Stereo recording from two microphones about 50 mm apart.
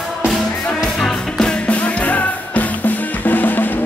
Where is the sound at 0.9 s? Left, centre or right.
Centre.